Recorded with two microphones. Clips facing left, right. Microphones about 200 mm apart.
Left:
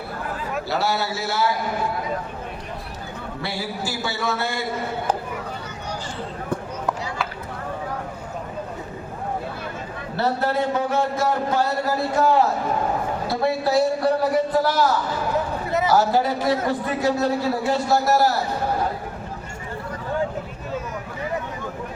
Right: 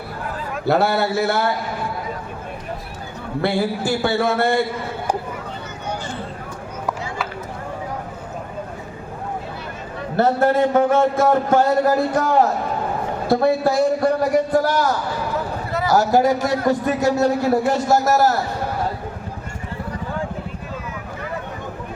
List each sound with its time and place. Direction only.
0.6 s a man's voice: 55° right (ahead or behind)
3.4 s a man's voice: 55° right (ahead or behind)
10.2 s a man's voice: 50° right (ahead or behind)
15.9 s a man's voice: 45° right (ahead or behind)